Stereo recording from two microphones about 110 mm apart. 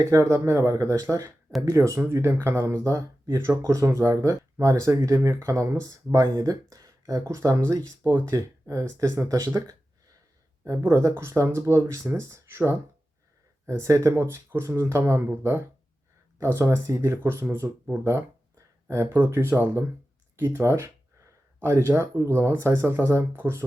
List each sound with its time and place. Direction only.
0.0 s speech: 30° right (ahead or behind)